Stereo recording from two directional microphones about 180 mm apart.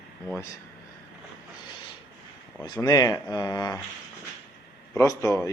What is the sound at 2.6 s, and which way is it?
Speech, 20° left (ahead or behind).